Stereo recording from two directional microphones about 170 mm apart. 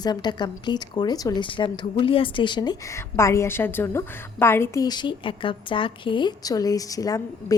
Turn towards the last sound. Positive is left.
turn(degrees=20)  # may be behind; listen again after turning